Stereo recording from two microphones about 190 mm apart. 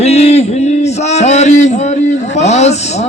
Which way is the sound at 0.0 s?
35° left (ahead or behind).